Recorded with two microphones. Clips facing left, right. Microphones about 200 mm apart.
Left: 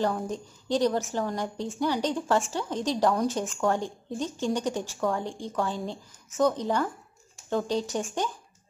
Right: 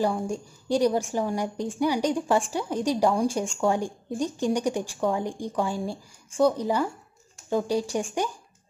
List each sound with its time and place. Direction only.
0.0 s speech: 10° right (ahead or behind)